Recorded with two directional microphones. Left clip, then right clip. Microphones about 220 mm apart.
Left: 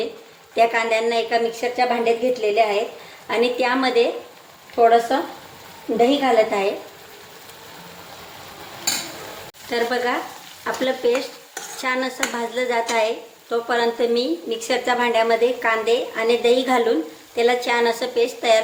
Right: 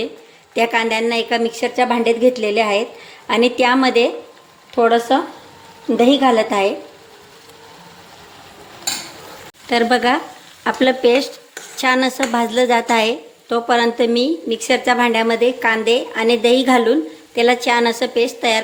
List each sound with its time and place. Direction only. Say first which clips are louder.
0.5 s a woman's voice: right 1 dB; 40° right (ahead or behind)
9.6 s a woman's voice: right 7 dB; 45° right (ahead or behind)